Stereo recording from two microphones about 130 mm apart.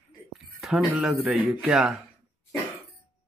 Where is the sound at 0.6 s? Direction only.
5° right (ahead or behind).